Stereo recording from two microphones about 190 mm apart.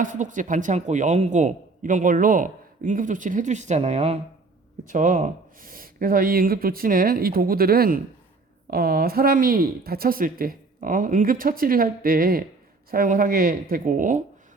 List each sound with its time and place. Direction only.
0.0 s speech: 40° right (ahead or behind)